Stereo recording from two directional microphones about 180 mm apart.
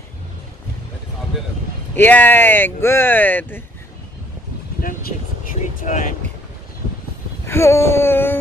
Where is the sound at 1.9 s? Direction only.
10° left (ahead or behind).